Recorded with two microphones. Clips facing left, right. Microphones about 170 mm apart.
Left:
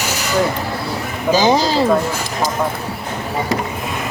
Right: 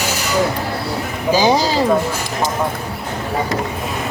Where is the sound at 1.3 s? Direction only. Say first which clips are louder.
Left 1 dB; 10° right (ahead or behind).